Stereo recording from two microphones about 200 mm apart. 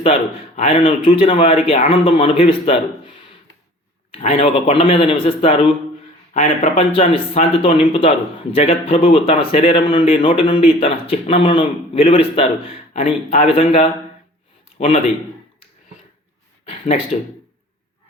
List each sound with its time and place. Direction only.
0.0 s a man's voice: 30° left (ahead or behind)
4.1 s a man's voice: 30° left (ahead or behind)
16.6 s speech: 30° left (ahead or behind)